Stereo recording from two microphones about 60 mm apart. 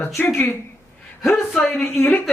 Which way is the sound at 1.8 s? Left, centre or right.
Left.